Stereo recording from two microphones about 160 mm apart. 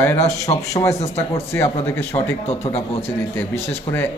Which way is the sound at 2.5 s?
40° left (ahead or behind).